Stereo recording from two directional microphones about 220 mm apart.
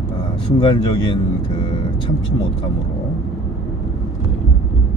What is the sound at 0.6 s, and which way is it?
Speech, 20° left (ahead or behind).